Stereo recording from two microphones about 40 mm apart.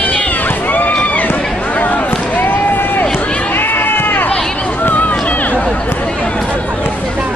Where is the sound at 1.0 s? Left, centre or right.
Left.